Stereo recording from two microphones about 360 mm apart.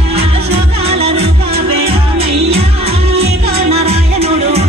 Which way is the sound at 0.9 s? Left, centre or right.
Centre.